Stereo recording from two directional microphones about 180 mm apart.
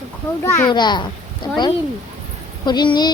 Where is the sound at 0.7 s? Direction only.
25° left (ahead or behind).